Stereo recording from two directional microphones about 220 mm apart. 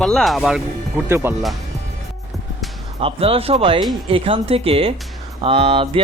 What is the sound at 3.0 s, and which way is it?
Music, 25° right (ahead or behind).